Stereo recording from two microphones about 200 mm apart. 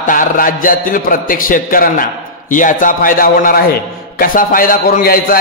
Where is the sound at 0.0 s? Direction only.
40° left (ahead or behind).